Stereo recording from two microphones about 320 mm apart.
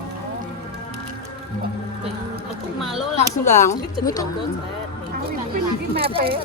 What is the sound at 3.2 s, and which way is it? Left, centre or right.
Speech, left.